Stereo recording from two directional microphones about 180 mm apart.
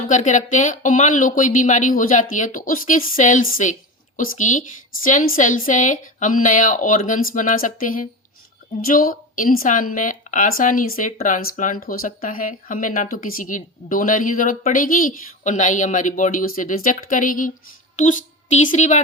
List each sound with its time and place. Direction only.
0.1 s speech: 45° left (ahead or behind)